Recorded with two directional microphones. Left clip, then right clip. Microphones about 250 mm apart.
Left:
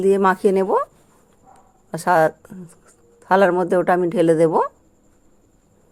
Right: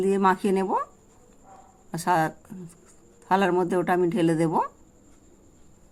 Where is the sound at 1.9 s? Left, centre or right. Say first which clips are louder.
Left 7 dB; left.